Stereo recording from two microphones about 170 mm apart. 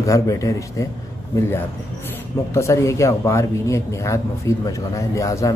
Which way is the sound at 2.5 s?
15° left (ahead or behind).